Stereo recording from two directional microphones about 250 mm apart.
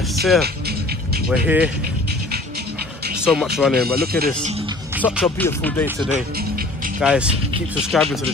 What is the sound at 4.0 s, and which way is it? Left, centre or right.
Speech, right.